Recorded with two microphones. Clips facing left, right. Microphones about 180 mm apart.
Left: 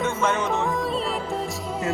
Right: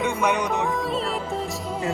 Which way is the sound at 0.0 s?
15° right (ahead or behind).